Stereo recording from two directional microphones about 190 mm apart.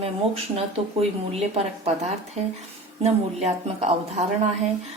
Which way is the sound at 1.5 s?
35° right (ahead or behind).